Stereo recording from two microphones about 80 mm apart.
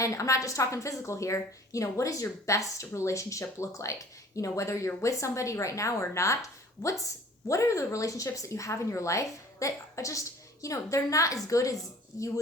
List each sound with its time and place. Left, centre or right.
0.0 s a woman's voice: left
5.1 s a woman's voice: left